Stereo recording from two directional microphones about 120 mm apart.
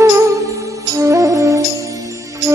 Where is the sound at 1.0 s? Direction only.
30° right (ahead or behind).